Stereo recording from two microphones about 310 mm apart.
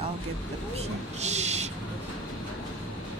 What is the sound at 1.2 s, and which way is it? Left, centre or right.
Speech, right.